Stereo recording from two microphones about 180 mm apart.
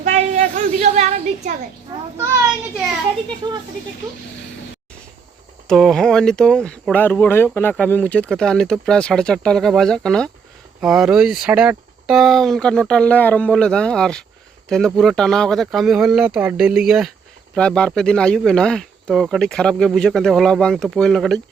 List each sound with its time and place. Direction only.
0.0 s a sound: 40° right (ahead or behind)
2.1 s a child's voice: 15° right (ahead or behind)
5.6 s speech: centre (ahead or behind)